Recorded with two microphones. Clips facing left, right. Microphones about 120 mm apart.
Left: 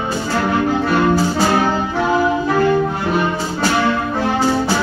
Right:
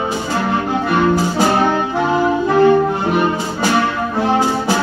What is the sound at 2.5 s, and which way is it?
Music, 25° right (ahead or behind).